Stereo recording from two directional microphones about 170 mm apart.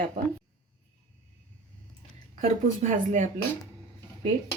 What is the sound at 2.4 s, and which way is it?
Speech, 45° right (ahead or behind).